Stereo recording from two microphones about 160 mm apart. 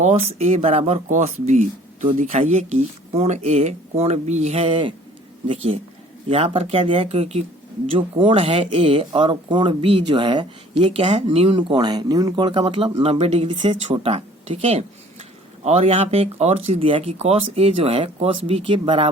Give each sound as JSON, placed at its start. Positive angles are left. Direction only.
{"t": 0.0, "sound": "speech", "side_deg": -45}
{"t": 1.0, "sound": "speech", "side_deg": -50}